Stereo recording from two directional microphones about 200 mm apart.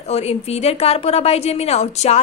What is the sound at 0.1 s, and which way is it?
A woman's voice, 30° left (ahead or behind).